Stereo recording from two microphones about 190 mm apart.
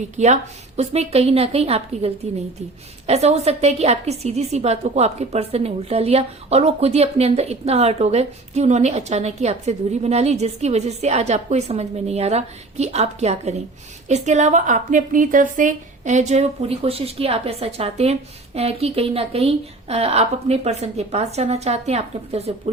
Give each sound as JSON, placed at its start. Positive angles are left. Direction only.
{"t": 0.2, "sound": "a woman's voice", "side_deg": -35}